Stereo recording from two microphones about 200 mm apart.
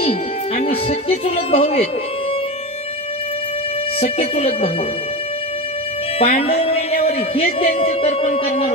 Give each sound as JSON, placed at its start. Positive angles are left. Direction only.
{"t": 0.6, "sound": "speech", "side_deg": 30}
{"t": 4.0, "sound": "speech", "side_deg": 30}
{"t": 6.1, "sound": "a man's voice", "side_deg": 30}